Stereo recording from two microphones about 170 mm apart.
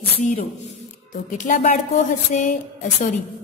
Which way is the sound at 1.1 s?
50° left (ahead or behind).